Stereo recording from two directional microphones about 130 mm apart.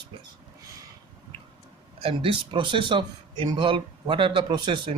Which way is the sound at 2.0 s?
45° right (ahead or behind).